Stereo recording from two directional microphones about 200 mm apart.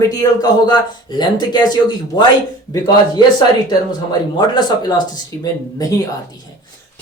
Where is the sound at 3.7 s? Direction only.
20° left (ahead or behind).